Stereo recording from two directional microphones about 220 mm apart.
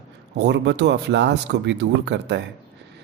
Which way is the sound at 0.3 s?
50° right (ahead or behind).